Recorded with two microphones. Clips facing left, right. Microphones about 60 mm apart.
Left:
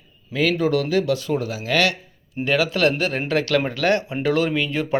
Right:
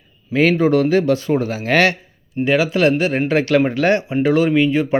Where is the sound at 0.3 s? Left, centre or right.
Right.